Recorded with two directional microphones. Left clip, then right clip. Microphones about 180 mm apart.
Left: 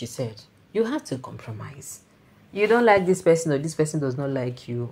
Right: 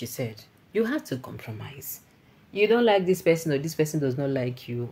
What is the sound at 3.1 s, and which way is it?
Speech, 10° left (ahead or behind).